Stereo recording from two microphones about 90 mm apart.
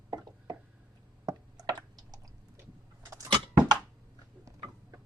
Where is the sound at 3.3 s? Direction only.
50° right (ahead or behind).